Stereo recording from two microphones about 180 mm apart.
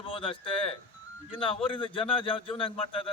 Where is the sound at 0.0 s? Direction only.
30° left (ahead or behind).